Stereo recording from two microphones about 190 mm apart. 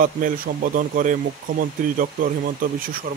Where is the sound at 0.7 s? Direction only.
45° right (ahead or behind).